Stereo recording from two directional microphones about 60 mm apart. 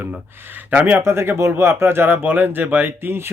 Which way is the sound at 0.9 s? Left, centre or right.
Right.